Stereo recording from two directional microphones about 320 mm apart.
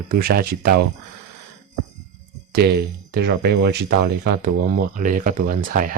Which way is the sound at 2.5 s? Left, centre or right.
Right.